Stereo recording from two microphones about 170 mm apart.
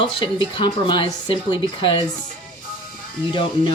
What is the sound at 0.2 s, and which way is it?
A woman's voice, 30° left (ahead or behind).